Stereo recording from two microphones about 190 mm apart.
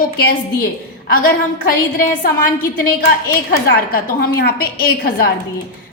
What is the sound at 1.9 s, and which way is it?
A woman's voice, 45° left (ahead or behind).